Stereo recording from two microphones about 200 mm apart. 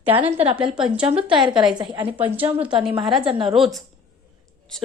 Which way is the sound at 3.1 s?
25° right (ahead or behind).